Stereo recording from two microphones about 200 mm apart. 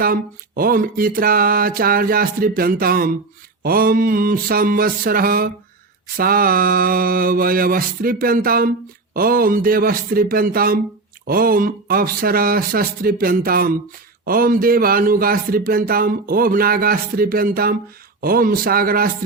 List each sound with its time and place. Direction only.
0.0 s speech: 45° right (ahead or behind)